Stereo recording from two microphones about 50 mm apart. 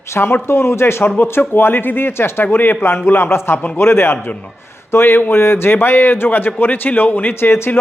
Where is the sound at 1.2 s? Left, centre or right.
Left.